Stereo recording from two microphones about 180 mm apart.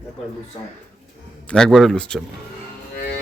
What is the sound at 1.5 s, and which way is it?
Speech, centre (ahead or behind).